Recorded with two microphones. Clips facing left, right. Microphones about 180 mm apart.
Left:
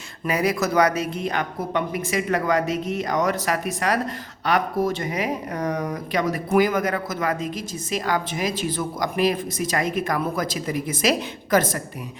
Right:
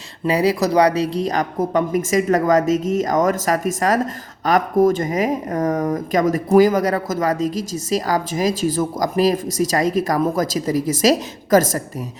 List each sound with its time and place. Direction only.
0.3 s a woman's voice: 30° right (ahead or behind)